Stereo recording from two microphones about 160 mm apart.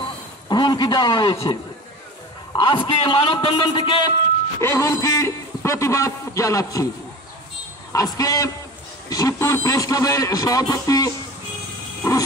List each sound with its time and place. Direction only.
0.5 s a man's voice: 25° left (ahead or behind)
4.6 s a man's voice: 15° left (ahead or behind)
7.9 s a man's voice: 20° left (ahead or behind)